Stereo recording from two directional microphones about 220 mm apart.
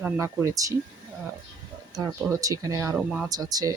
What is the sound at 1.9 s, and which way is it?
Speech, 15° right (ahead or behind).